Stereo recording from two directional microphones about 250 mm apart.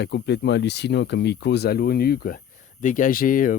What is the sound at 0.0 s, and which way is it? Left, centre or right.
Speech, left.